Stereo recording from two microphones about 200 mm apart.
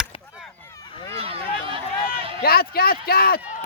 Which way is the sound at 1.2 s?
25° right (ahead or behind).